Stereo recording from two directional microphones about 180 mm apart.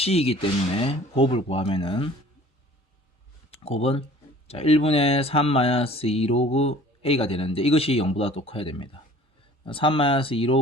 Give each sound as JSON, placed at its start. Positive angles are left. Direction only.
{"t": 0.0, "sound": "speech", "side_deg": 35}
{"t": 3.6, "sound": "speech", "side_deg": 35}